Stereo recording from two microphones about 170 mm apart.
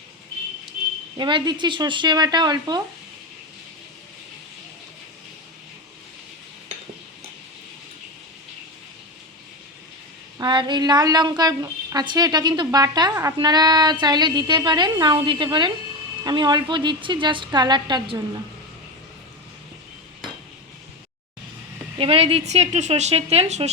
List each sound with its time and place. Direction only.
1.1 s a woman's voice: 25° right (ahead or behind)
10.3 s a woman's voice: 25° right (ahead or behind)
21.9 s a woman's voice: 35° right (ahead or behind)